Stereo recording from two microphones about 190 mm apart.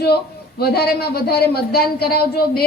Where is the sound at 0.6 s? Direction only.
55° left (ahead or behind).